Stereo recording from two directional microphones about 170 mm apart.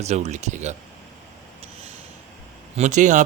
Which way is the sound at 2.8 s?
45° right (ahead or behind).